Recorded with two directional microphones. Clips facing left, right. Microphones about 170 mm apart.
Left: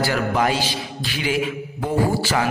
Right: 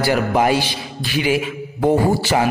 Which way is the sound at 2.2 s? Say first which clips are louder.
Right 4 dB; 20° right (ahead or behind).